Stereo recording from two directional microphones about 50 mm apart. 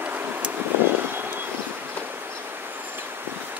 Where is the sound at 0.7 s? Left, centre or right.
Right.